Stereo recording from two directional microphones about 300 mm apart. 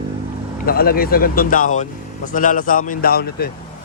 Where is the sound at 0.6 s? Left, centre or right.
Left.